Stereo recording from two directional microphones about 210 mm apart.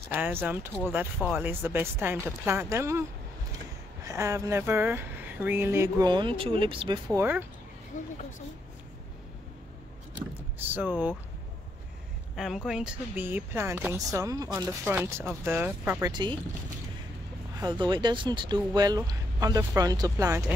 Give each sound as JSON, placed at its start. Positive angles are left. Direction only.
{"t": 0.1, "sound": "speech", "side_deg": -10}
{"t": 7.2, "sound": "speech", "side_deg": -10}
{"t": 7.9, "sound": "speech", "side_deg": 35}
{"t": 10.6, "sound": "speech", "side_deg": -10}
{"t": 12.4, "sound": "speech", "side_deg": 0}
{"t": 16.1, "sound": "speech", "side_deg": -20}
{"t": 17.6, "sound": "speech", "side_deg": -20}